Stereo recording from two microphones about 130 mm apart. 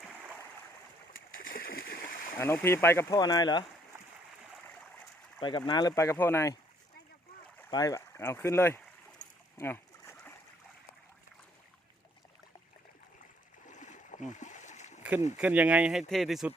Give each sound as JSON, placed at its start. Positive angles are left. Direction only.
{"t": 2.4, "sound": "speech", "side_deg": 20}
{"t": 3.2, "sound": "speech", "side_deg": 30}
{"t": 5.4, "sound": "speech", "side_deg": 35}
{"t": 5.9, "sound": "speech", "side_deg": 20}
{"t": 7.7, "sound": "speech", "side_deg": 30}
{"t": 9.6, "sound": "boat", "side_deg": 20}
{"t": 13.7, "sound": "splash", "side_deg": 70}
{"t": 15.4, "sound": "speech", "side_deg": -10}